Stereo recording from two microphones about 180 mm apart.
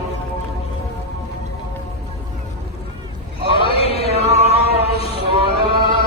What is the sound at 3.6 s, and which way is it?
Music, 30° left (ahead or behind).